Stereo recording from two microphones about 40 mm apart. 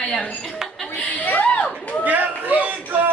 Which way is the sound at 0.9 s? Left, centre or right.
Left.